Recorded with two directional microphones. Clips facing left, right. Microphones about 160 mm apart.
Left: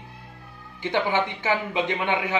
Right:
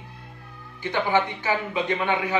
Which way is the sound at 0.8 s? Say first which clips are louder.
Right 1 dB; 20° left (ahead or behind).